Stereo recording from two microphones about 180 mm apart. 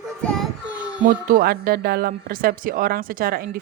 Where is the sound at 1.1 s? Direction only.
50° right (ahead or behind).